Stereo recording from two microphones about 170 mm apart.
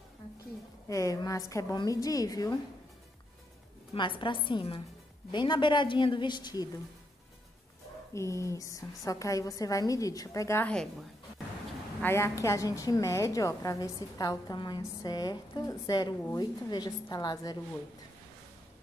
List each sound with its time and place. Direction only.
0.8 s a woman's voice: 20° left (ahead or behind)
3.9 s a woman's voice: 30° left (ahead or behind)
8.1 s a woman's voice: 15° left (ahead or behind)
12.0 s a woman's voice: 15° left (ahead or behind)